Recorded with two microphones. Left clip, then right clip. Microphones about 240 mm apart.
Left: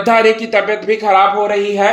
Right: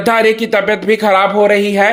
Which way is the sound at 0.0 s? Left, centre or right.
Right.